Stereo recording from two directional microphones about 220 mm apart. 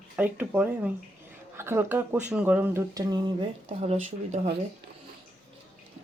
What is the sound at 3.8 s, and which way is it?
Speech, 30° right (ahead or behind).